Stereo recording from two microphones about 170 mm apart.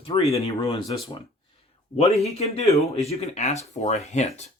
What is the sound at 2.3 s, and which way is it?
Speech, 40° left (ahead or behind).